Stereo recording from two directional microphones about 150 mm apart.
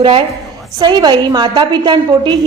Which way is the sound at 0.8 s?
30° right (ahead or behind).